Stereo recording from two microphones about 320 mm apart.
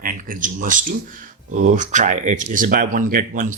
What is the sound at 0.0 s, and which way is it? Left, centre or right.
Speech, right.